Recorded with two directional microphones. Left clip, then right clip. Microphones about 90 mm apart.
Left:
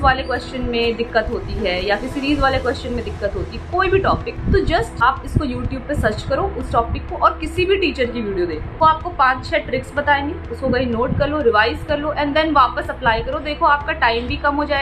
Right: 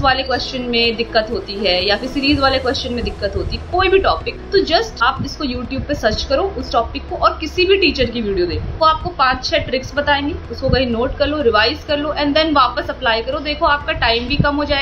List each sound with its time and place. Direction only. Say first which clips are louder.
0.0 s a woman's voice: right 2 dB; 20° right (ahead or behind)